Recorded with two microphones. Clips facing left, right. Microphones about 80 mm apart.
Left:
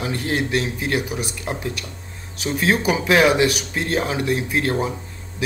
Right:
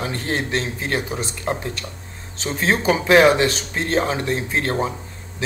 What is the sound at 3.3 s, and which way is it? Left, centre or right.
Speech, centre.